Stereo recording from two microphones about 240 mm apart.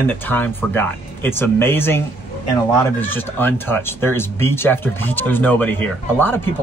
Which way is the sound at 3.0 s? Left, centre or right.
Centre.